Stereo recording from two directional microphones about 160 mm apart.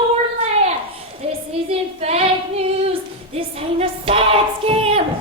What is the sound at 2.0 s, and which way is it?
Child singing, 40° right (ahead or behind).